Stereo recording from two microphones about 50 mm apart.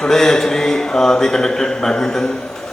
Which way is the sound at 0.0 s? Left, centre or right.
Centre.